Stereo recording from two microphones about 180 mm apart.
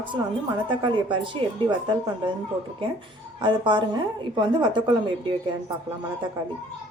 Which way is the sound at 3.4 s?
25° right (ahead or behind).